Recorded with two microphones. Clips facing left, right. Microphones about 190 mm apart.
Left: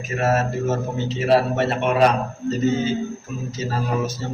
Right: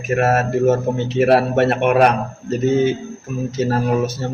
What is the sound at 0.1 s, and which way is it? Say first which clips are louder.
A man's voice: right 5 dB; 60° right (ahead or behind).